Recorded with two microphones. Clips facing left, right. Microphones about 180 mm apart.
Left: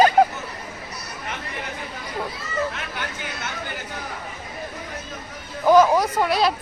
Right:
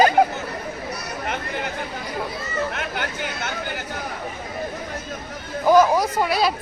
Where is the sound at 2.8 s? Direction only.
65° right (ahead or behind).